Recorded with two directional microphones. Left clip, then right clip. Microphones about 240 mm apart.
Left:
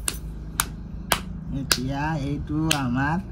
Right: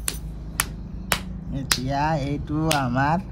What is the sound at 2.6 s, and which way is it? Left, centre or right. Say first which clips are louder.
Speech: right 2 dB; right.